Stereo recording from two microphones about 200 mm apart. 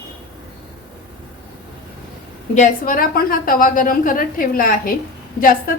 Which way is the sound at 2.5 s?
40° left (ahead or behind).